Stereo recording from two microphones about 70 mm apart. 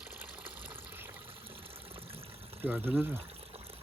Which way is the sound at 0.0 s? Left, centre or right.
Right.